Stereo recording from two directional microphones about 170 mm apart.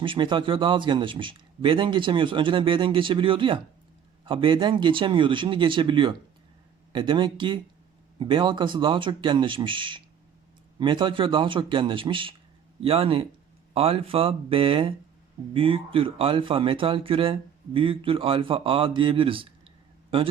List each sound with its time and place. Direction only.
0.0 s a man's voice: 30° right (ahead or behind)